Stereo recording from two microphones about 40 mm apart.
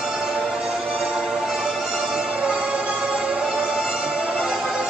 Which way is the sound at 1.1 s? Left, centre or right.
Centre.